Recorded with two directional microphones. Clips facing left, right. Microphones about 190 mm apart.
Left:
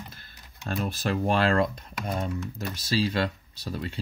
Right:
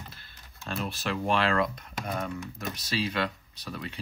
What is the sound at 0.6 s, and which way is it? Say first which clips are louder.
Speech: left 4 dB; 40° left (ahead or behind).